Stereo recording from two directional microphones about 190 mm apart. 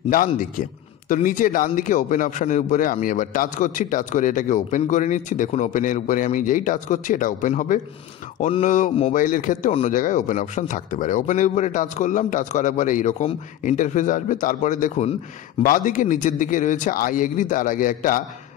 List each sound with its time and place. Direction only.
0.3 s speech: 45° left (ahead or behind)